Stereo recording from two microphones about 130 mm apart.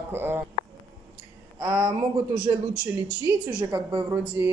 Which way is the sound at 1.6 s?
30° right (ahead or behind).